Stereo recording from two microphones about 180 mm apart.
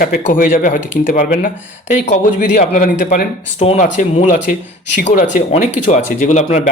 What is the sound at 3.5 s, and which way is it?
Speech, 35° left (ahead or behind).